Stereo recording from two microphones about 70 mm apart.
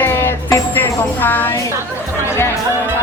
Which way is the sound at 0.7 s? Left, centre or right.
Left.